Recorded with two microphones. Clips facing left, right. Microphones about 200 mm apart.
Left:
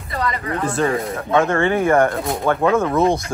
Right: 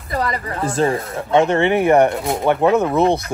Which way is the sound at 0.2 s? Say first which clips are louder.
Left 2 dB; 30° right (ahead or behind).